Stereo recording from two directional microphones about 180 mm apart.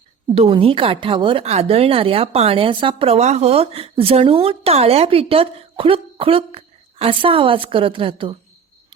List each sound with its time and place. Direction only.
0.3 s speech: 30° right (ahead or behind)